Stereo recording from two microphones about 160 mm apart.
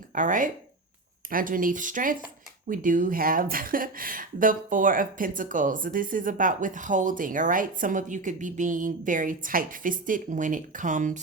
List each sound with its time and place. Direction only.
0.1 s speech: 55° right (ahead or behind)